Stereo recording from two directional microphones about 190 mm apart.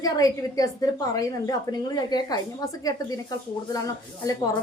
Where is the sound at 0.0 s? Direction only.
20° left (ahead or behind).